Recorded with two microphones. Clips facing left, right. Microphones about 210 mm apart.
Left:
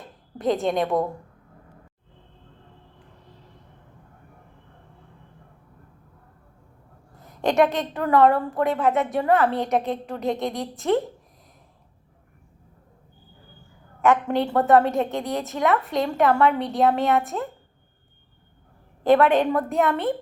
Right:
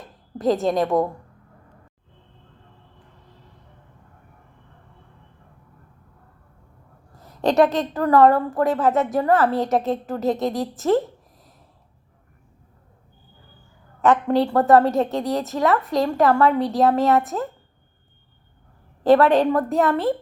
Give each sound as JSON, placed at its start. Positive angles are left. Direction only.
{"t": 0.3, "sound": "a woman's voice", "side_deg": 0}
{"t": 7.2, "sound": "a sound", "side_deg": 20}
{"t": 7.6, "sound": "a woman's voice", "side_deg": 0}
{"t": 14.1, "sound": "a woman's voice", "side_deg": 0}
{"t": 19.2, "sound": "a woman's voice", "side_deg": 0}